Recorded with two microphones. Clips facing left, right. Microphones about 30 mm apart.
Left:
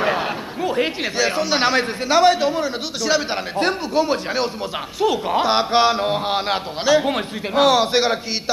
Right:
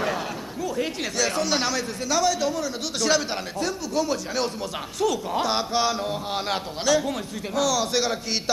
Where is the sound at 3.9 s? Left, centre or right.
Left.